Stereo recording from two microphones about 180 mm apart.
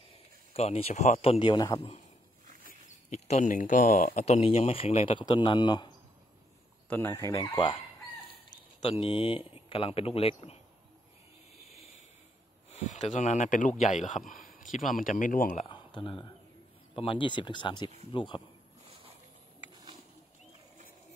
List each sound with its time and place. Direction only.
0.5 s speech: 35° left (ahead or behind)
3.1 s speech: 40° left (ahead or behind); by 5.9 s 25° left (ahead or behind)
6.9 s speech: 15° left (ahead or behind)
7.3 s speech: 30° left (ahead or behind)
11.5 s a sound: centre (ahead or behind)
12.7 s speech: 40° left (ahead or behind)
15.7 s speech: 25° left (ahead or behind)